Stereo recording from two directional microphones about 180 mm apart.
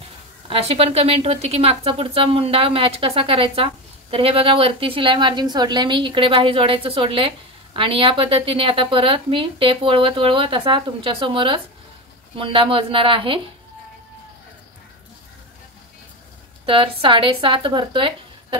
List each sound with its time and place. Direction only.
0.5 s a woman's voice: 35° right (ahead or behind)
16.6 s a woman's voice: 30° right (ahead or behind)